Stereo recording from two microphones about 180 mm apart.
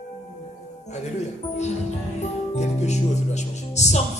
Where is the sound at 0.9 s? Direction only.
40° left (ahead or behind).